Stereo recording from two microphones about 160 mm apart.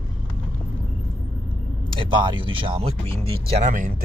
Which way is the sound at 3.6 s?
55° right (ahead or behind).